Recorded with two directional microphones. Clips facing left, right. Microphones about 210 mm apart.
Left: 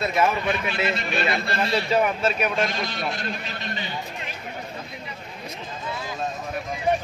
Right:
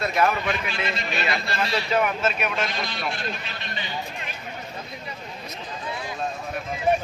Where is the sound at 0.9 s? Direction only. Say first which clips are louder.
Left 2 dB; 55° left (ahead or behind).